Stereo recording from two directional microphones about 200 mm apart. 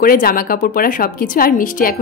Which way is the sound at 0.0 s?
45° left (ahead or behind).